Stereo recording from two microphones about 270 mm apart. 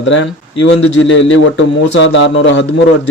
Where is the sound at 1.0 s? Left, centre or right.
Left.